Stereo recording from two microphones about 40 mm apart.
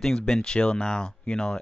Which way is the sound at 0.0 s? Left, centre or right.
Centre.